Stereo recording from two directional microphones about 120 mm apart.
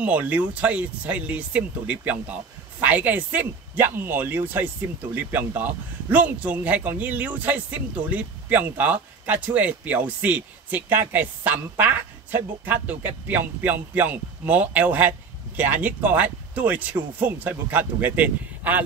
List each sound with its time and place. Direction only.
0.0 s a man's voice: 15° right (ahead or behind)